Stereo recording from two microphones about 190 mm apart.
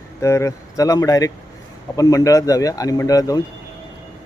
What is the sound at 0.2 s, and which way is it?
A man's voice, 15° left (ahead or behind).